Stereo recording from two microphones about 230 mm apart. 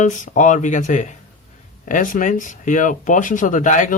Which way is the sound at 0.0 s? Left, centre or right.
Left.